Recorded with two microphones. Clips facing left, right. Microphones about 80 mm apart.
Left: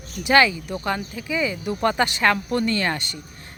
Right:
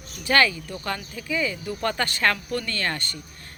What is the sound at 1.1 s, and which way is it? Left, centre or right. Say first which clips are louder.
Speech: left 2 dB; centre.